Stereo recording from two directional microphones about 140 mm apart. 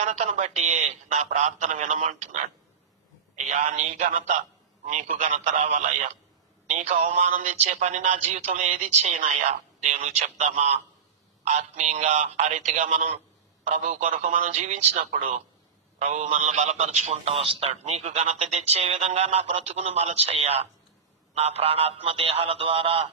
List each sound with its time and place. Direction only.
0.0 s a man's voice: 60° right (ahead or behind); by 23.0 s 40° right (ahead or behind)